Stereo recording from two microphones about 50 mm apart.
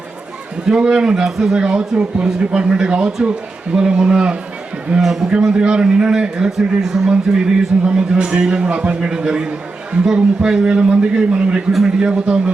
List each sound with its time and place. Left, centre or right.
0.7 s a man's voice: centre